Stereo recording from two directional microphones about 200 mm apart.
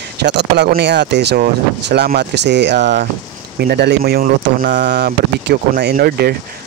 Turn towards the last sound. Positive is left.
turn(degrees=-50)  # may be behind; listen again after turning